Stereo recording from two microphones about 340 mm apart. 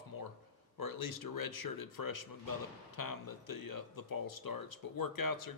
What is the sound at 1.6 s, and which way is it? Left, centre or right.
Speech, left.